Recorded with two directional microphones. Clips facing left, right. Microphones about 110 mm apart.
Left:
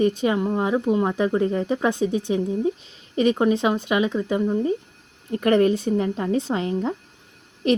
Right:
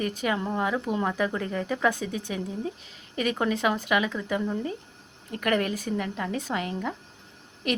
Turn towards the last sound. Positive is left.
turn(degrees=25)  # may be behind; listen again after turning